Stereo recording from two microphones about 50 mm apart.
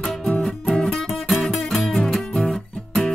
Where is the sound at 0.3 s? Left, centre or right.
Left.